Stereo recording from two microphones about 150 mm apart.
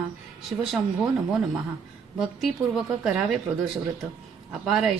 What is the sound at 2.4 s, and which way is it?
A woman's voice, centre (ahead or behind).